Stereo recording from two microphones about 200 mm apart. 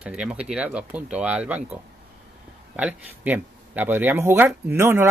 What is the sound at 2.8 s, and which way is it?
Speech, 5° right (ahead or behind).